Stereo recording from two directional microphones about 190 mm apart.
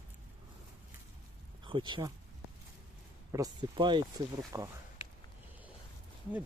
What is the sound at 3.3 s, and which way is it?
Speech, 20° right (ahead or behind).